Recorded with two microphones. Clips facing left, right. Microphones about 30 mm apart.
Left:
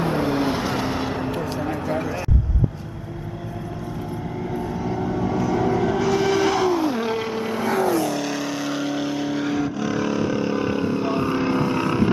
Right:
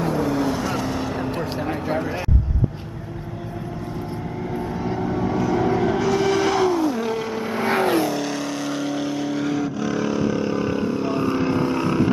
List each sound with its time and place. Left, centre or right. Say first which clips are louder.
0.0 s vehicle: even; left
1.5 s a sound: even; right
4.7 s vehicle: even; right
5.0 s vehicle: right 1 dB; centre
6.8 s vehicle: even; centre
7.6 s vehicle: right 2 dB; right
8.1 s vehicle: even; centre